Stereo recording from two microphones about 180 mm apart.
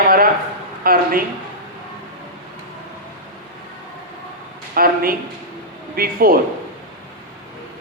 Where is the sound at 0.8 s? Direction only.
55° right (ahead or behind).